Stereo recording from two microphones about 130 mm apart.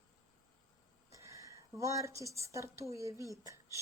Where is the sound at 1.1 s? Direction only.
25° right (ahead or behind).